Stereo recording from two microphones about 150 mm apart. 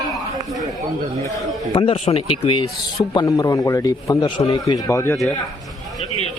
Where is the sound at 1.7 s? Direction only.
35° left (ahead or behind).